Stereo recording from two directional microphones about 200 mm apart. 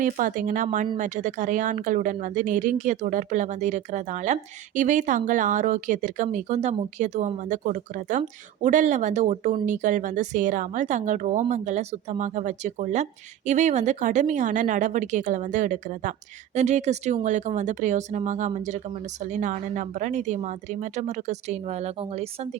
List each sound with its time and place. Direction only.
0.0 s a woman's voice: 40° right (ahead or behind)